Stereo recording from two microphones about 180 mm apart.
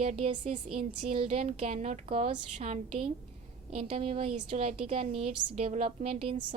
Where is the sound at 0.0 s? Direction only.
35° right (ahead or behind).